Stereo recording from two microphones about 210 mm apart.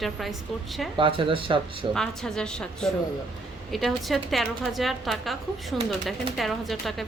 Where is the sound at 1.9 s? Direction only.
5° left (ahead or behind).